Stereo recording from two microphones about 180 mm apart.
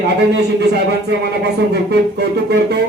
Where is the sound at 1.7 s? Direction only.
65° right (ahead or behind).